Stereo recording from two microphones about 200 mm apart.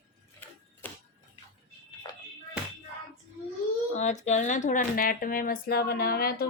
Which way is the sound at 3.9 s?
35° left (ahead or behind).